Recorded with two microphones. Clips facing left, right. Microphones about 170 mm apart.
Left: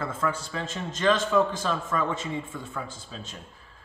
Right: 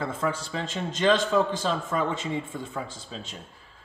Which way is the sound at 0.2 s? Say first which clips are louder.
Right 1 dB; 30° right (ahead or behind).